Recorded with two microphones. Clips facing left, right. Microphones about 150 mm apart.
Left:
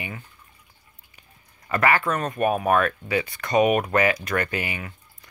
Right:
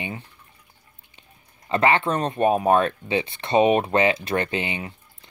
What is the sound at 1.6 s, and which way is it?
Speech, 25° right (ahead or behind).